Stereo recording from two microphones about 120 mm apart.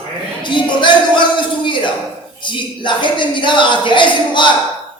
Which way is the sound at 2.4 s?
40° left (ahead or behind).